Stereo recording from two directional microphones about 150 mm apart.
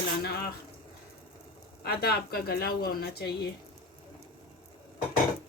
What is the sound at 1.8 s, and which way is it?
A woman's voice, 90° left.